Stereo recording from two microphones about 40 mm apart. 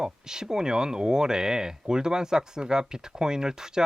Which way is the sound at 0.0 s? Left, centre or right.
Centre.